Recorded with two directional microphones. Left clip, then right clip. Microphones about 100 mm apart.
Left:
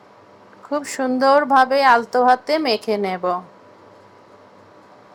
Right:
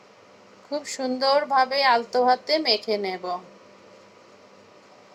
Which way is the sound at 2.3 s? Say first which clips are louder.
Left 5 dB; 20° right (ahead or behind).